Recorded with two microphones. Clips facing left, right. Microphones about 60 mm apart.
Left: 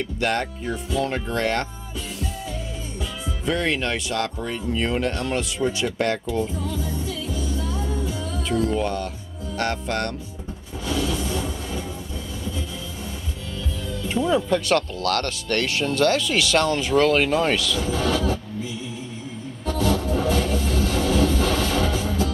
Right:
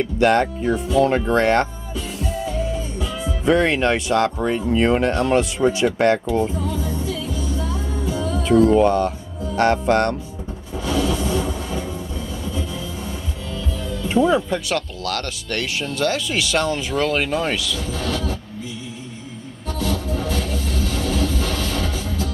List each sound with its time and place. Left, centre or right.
0.0 s speech: right
3.4 s speech: right
6.8 s music: centre
8.4 s speech: right
10.9 s train: centre
14.0 s speech: right
17.0 s speech: centre
17.7 s speech: centre
19.7 s music: centre